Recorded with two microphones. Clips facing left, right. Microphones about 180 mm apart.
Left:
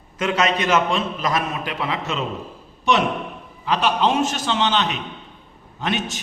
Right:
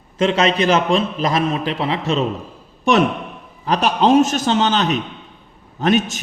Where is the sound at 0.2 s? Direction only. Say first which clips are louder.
Right 5 dB; 30° right (ahead or behind).